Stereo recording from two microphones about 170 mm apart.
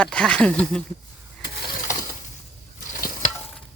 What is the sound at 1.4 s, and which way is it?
Ratchet, 70° left (ahead or behind).